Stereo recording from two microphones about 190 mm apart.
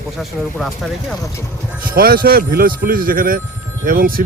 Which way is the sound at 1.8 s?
50° right (ahead or behind).